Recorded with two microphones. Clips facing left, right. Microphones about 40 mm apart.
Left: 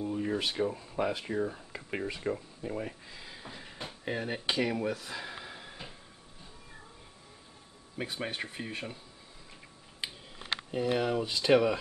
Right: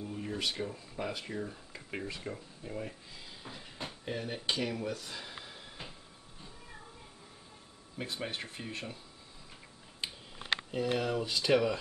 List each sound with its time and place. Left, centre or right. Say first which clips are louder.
0.0 s a sound: left 7 dB; centre
0.3 s speech: left 3 dB; centre
3.4 s a sound: right 1 dB; centre
4.0 s speech: left 4 dB; left
8.0 s speech: left 3 dB; centre
10.7 s speech: left 4 dB; centre